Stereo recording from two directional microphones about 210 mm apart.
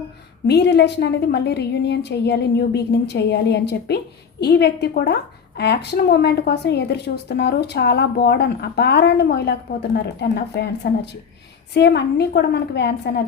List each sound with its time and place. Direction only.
0.4 s a woman's voice: 50° left (ahead or behind)